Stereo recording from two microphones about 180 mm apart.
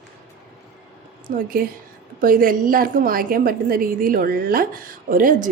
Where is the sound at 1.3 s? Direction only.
50° right (ahead or behind).